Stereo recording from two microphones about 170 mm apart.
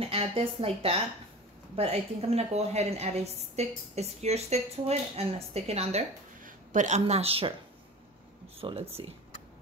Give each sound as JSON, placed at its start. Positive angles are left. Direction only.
{"t": 0.0, "sound": "a woman's voice", "side_deg": -35}
{"t": 8.5, "sound": "a woman's voice", "side_deg": -35}